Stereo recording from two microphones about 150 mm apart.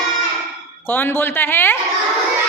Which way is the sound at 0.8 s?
15° left (ahead or behind).